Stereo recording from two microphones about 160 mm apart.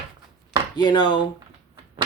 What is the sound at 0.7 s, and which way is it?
Speech, 25° left (ahead or behind).